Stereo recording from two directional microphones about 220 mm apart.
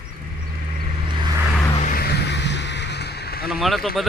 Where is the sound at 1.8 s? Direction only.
45° left (ahead or behind).